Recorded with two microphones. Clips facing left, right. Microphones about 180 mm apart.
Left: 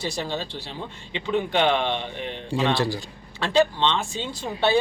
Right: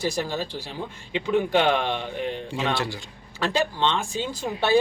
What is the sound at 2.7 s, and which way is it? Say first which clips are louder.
Speech: left 4 dB; 35° left (ahead or behind).